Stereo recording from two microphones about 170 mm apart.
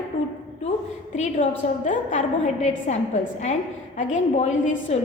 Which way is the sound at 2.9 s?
45° left (ahead or behind).